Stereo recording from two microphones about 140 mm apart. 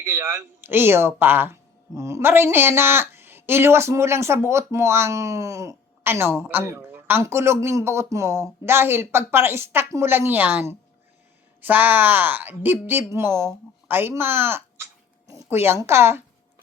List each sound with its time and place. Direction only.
0.0 s speech: 15° right (ahead or behind)